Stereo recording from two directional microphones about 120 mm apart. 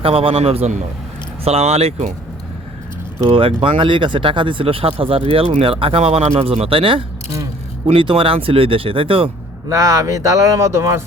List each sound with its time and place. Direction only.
0.0 s a man's voice: 50° right (ahead or behind)
3.2 s speech: 45° right (ahead or behind)
9.6 s speech: 30° right (ahead or behind)